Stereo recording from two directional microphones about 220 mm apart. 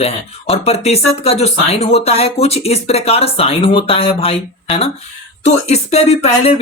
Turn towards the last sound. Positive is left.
turn(degrees=25)  # may be behind; listen again after turning